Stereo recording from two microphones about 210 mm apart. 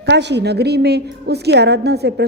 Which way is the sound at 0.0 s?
55° right (ahead or behind).